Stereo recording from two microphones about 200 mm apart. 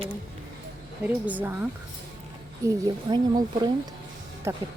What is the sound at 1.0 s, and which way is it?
Speech, 10° right (ahead or behind).